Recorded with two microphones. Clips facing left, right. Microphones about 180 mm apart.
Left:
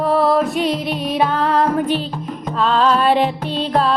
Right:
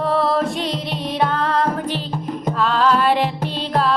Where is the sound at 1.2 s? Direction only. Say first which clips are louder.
Left 2 dB; 15° left (ahead or behind).